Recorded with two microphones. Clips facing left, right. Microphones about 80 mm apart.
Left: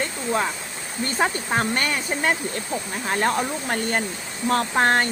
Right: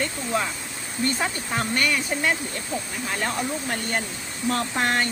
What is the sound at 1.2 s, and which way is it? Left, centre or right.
Speech, left.